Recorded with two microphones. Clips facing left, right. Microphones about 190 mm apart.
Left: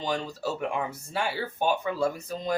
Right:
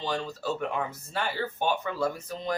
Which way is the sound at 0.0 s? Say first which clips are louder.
Left 1 dB; 15° left (ahead or behind).